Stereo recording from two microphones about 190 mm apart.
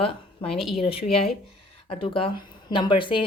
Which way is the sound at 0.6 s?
Centre (ahead or behind).